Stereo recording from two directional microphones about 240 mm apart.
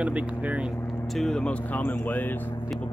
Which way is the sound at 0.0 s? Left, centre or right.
Centre.